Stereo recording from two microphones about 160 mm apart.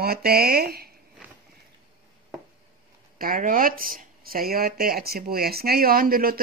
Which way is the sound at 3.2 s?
60° right (ahead or behind).